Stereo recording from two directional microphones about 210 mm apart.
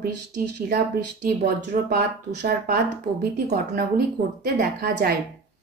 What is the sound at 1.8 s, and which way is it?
A woman's voice, 45° right (ahead or behind).